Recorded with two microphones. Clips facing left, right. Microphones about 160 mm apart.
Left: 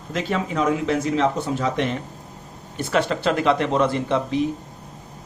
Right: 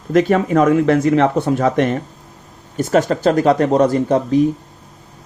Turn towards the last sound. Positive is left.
turn(degrees=-45)  # may be behind; listen again after turning